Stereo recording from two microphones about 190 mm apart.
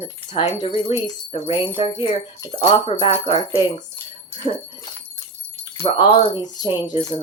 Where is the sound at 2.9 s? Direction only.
35° left (ahead or behind).